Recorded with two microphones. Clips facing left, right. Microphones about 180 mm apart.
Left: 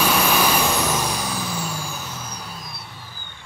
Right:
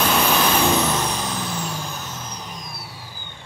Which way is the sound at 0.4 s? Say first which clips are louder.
Right 2 dB; 10° left (ahead or behind).